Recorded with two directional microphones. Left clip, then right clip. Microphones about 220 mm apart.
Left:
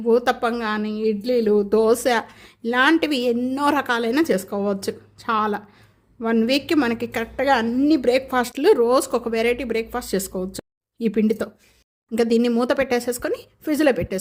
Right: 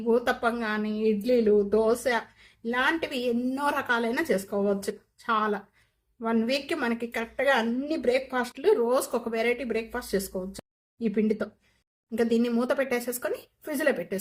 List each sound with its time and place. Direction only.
0.1 s a woman's voice: 50° left (ahead or behind)